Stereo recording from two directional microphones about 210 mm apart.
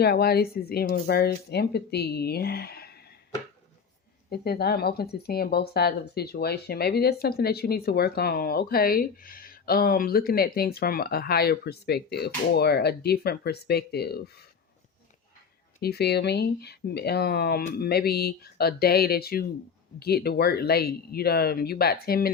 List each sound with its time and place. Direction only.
0.0 s speech: 50° left (ahead or behind)
4.3 s speech: 50° left (ahead or behind)
15.8 s speech: 50° left (ahead or behind)